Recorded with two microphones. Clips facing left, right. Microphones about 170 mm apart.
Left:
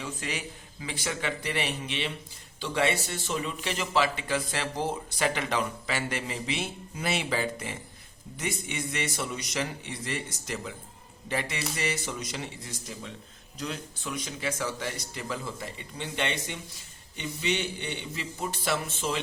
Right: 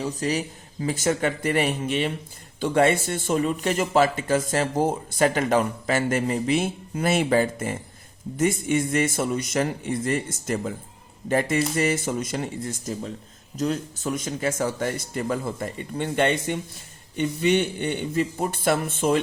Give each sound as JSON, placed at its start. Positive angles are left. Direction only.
{"t": 0.0, "sound": "speech", "side_deg": -40}